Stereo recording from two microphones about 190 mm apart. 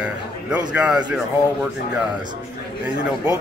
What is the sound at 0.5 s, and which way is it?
Speech, 5° right (ahead or behind).